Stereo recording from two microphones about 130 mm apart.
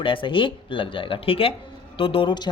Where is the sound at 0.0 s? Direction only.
40° left (ahead or behind).